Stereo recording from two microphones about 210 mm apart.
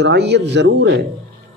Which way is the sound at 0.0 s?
55° right (ahead or behind).